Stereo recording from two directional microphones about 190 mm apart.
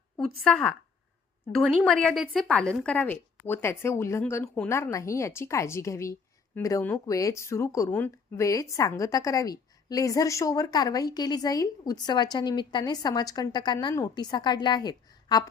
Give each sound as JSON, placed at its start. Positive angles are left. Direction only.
{"t": 0.4, "sound": "a woman's voice", "side_deg": 5}